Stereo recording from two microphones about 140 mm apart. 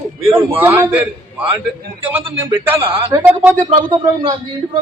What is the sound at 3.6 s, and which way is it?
Speech, 35° right (ahead or behind).